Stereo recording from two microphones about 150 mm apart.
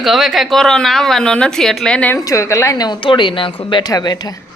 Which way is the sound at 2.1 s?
20° left (ahead or behind).